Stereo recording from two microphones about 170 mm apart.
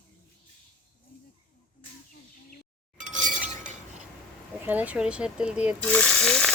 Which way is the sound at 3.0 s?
45° right (ahead or behind).